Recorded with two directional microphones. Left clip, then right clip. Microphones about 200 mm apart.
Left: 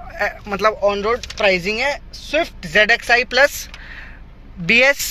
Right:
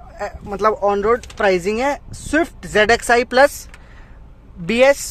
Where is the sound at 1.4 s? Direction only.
35° right (ahead or behind).